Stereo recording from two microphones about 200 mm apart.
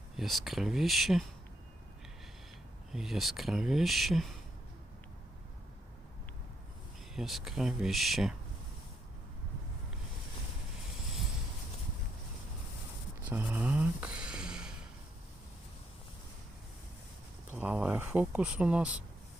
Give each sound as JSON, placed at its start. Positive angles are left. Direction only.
{"t": 0.2, "sound": "speech", "side_deg": 0}
{"t": 2.9, "sound": "speech", "side_deg": 0}
{"t": 7.2, "sound": "speech", "side_deg": 0}
{"t": 13.3, "sound": "speech", "side_deg": -10}
{"t": 17.5, "sound": "speech", "side_deg": -5}